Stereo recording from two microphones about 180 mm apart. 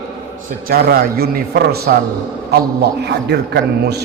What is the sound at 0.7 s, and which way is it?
A man's voice, 60° right (ahead or behind).